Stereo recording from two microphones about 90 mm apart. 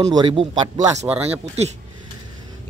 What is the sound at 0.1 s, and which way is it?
Speech, 65° right (ahead or behind).